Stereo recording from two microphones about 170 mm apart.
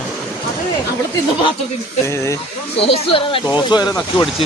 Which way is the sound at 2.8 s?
35° left (ahead or behind).